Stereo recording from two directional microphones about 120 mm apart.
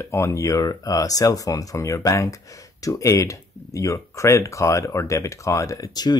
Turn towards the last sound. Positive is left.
turn(degrees=35)  # may be behind; listen again after turning